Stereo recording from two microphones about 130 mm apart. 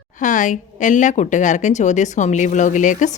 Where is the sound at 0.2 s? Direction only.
80° left.